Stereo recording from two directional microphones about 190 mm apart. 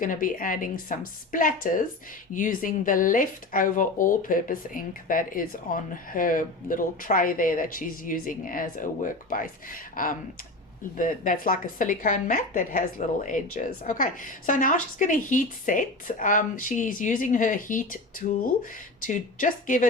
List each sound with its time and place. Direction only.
0.0 s speech: 45° left (ahead or behind)
19.0 s speech: 45° left (ahead or behind)